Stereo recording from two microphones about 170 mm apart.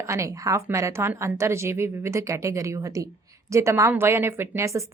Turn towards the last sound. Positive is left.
turn(degrees=-15)  # may be behind; listen again after turning